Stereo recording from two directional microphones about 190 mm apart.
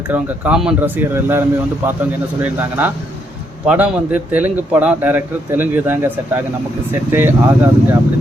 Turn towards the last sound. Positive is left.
turn(degrees=-10)  # may be behind; listen again after turning